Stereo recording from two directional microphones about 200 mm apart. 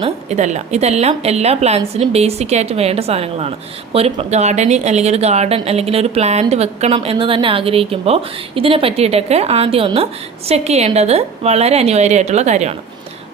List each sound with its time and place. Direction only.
0.0 s a woman's voice: 35° right (ahead or behind)